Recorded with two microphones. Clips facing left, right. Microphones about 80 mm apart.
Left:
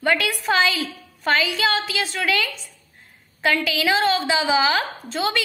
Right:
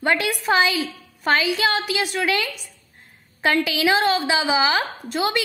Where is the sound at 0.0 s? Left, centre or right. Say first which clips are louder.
Even; right.